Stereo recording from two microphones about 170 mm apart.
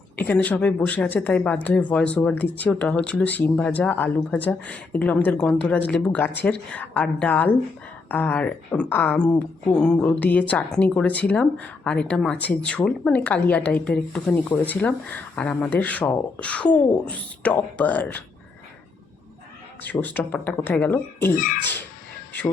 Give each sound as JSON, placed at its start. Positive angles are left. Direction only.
{"t": 0.2, "sound": "speech", "side_deg": 10}
{"t": 19.8, "sound": "speech", "side_deg": 10}
{"t": 21.3, "sound": "speech", "side_deg": 50}
{"t": 21.6, "sound": "speech", "side_deg": 10}